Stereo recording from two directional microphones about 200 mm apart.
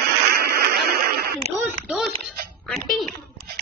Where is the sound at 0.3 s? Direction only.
50° right (ahead or behind).